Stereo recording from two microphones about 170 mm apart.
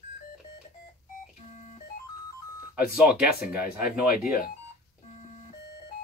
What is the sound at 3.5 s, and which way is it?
Speech, 60° left (ahead or behind).